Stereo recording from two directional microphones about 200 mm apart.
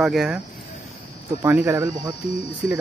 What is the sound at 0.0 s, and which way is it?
Speech, centre (ahead or behind).